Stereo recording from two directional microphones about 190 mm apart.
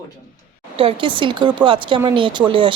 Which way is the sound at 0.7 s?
30° right (ahead or behind).